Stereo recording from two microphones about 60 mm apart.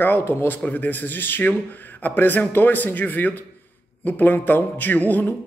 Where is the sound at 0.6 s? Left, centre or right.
Left.